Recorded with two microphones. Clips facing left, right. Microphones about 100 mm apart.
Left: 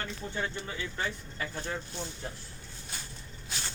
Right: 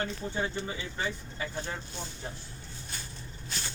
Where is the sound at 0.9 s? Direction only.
5° right (ahead or behind).